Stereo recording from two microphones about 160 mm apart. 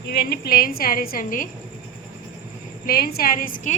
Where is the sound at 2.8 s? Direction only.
75° left (ahead or behind); by 3.7 s 60° left (ahead or behind).